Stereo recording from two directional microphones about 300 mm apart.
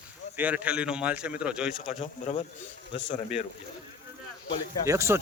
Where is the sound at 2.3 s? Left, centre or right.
Left.